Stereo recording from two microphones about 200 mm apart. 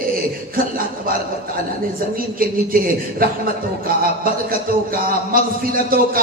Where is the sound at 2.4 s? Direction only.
45° right (ahead or behind).